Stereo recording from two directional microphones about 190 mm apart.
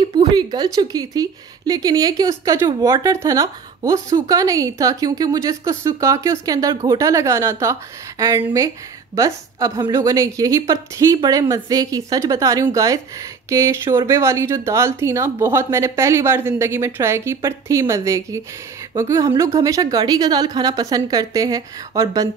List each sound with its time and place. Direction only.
0.0 s speech: 25° right (ahead or behind)
9.1 s speech: 20° right (ahead or behind)